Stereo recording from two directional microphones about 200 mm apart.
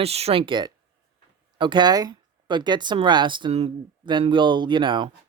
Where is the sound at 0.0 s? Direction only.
30° right (ahead or behind).